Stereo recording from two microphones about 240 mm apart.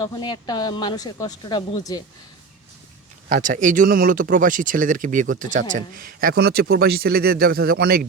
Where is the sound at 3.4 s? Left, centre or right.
Right.